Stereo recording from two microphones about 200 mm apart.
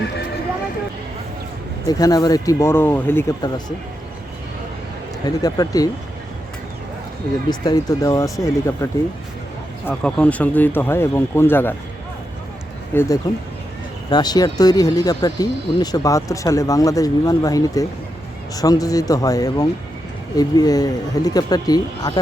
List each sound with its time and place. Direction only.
1.9 s speech: 20° left (ahead or behind)
5.2 s speech: 20° left (ahead or behind)
7.6 s speech: 20° left (ahead or behind)
12.9 s speech: 10° left (ahead or behind)